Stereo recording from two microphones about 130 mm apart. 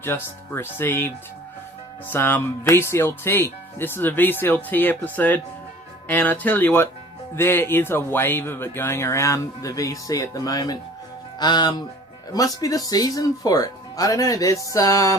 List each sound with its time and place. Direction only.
0.0 s speech: 15° left (ahead or behind)